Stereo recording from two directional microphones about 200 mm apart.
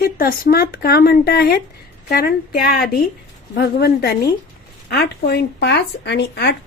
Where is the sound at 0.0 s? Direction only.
45° left (ahead or behind).